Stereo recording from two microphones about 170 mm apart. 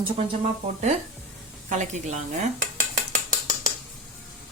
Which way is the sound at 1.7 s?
45° right (ahead or behind).